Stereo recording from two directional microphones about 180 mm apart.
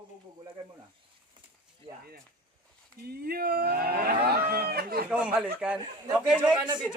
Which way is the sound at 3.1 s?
60° right (ahead or behind).